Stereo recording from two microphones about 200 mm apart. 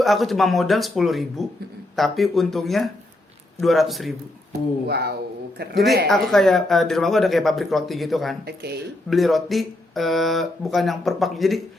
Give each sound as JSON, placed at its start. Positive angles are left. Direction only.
{"t": 0.0, "sound": "speech", "side_deg": 0}
{"t": 4.9, "sound": "speech", "side_deg": -55}
{"t": 5.7, "sound": "speech", "side_deg": 0}
{"t": 8.4, "sound": "speech", "side_deg": -55}
{"t": 9.0, "sound": "speech", "side_deg": 0}